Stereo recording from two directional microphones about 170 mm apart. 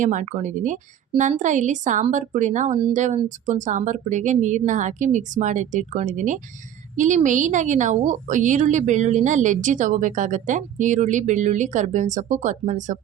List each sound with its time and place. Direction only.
0.0 s a woman's voice: 45° right (ahead or behind)